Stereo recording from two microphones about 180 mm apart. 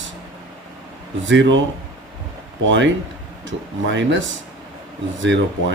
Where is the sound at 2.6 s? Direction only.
90° right.